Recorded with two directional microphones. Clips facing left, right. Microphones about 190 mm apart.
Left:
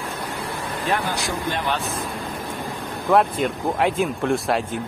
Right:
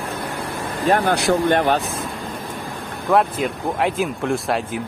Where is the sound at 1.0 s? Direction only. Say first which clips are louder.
Right 8 dB; 60° right (ahead or behind).